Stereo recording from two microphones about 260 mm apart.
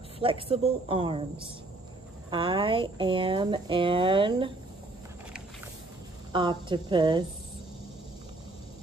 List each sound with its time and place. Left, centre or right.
0.2 s speech: right
6.3 s a woman's voice: centre